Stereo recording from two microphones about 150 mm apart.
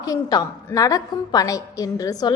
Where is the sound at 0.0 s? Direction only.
25° left (ahead or behind).